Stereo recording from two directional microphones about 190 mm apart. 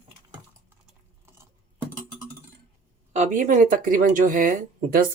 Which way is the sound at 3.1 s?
40° right (ahead or behind).